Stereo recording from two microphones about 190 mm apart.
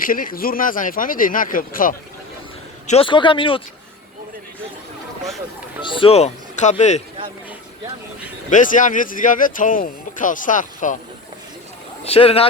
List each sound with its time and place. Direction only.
0.0 s speech: 50° left (ahead or behind)
2.8 s speech: 30° left (ahead or behind)
5.8 s speech: 25° left (ahead or behind)
8.4 s speech: 45° left (ahead or behind)
12.0 s speech: 30° left (ahead or behind)